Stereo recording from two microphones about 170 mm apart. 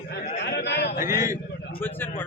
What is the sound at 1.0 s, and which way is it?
Speech, 15° right (ahead or behind).